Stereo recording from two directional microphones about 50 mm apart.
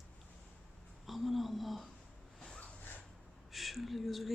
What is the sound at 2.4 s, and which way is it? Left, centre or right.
Snort, centre.